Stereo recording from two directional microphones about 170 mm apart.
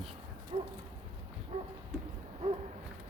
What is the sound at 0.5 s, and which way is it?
Pigeon, 30° right (ahead or behind).